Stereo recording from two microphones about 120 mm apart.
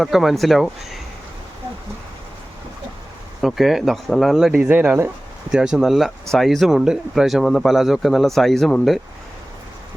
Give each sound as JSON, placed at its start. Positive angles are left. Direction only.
{"t": 0.0, "sound": "speech", "side_deg": 0}
{"t": 3.4, "sound": "speech", "side_deg": 0}
{"t": 4.6, "sound": "speech", "side_deg": -15}